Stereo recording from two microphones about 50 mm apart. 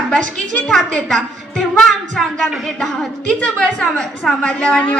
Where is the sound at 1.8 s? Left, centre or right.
Centre.